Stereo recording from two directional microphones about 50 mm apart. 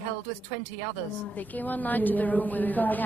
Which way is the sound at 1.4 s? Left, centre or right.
Left.